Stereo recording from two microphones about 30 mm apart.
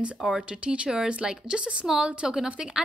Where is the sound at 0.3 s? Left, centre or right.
Right.